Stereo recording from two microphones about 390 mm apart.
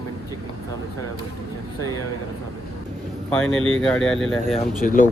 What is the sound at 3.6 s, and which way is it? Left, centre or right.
Speech, centre.